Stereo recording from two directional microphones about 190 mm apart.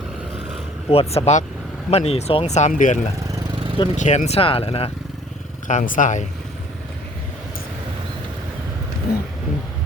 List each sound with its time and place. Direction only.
0.9 s speech: 30° left (ahead or behind)
5.6 s speech: 45° left (ahead or behind)
9.1 s vehicle: 55° left (ahead or behind)